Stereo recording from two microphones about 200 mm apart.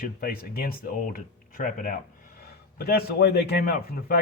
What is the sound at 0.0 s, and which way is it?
Speech, 50° left (ahead or behind).